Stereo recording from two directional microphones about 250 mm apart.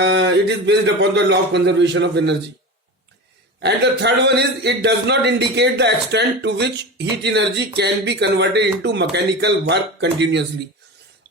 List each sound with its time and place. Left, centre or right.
0.0 s a man's voice: right
3.6 s a man's voice: right